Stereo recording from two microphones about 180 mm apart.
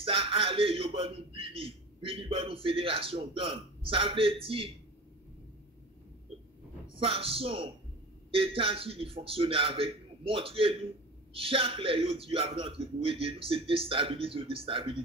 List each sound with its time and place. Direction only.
0.0 s a man's voice: 30° right (ahead or behind)
7.0 s a man's voice: 30° right (ahead or behind)